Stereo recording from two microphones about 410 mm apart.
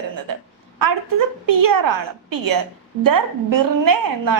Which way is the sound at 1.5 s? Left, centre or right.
Right.